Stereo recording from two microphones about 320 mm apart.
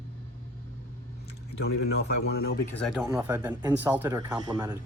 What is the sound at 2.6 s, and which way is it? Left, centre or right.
Speech, centre.